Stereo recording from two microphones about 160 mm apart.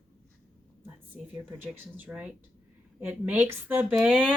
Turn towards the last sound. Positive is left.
turn(degrees=-10)  # may be behind; listen again after turning